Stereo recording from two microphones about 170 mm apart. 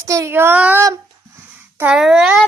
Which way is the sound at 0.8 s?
15° right (ahead or behind).